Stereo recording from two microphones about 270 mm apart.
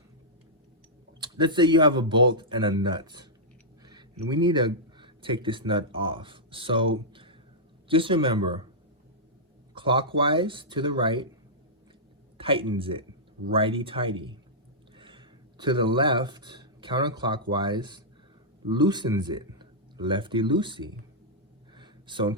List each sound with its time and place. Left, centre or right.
1.2 s speech: centre
7.1 s a sound: centre
7.9 s speech: centre
9.7 s speech: centre
12.4 s speech: centre
21.8 s a sound: centre